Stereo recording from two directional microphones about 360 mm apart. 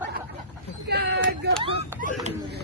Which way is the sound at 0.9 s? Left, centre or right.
Right.